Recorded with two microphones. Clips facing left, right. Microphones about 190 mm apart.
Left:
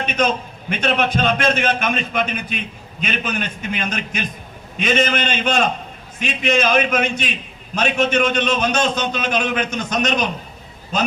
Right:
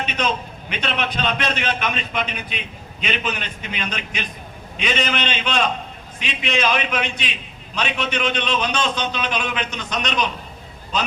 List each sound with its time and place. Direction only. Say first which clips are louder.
0.0 s a man's voice: left 4 dB; 45° left (ahead or behind)